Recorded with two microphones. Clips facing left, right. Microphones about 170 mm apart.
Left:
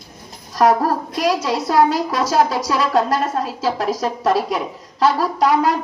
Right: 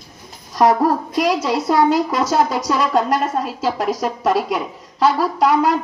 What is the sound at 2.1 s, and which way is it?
Speech, 20° right (ahead or behind).